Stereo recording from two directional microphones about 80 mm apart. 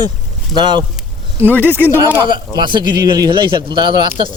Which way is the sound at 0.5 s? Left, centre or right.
Right.